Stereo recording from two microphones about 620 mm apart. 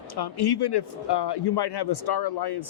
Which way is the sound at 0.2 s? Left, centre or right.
Left.